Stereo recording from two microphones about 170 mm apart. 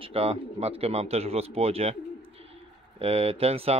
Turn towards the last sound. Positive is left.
turn(degrees=-35)  # may be behind; listen again after turning